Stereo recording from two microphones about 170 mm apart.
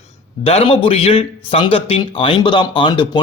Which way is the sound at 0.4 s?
35° left (ahead or behind).